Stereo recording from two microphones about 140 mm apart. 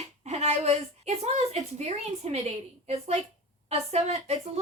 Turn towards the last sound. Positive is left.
turn(degrees=-50)  # may be behind; listen again after turning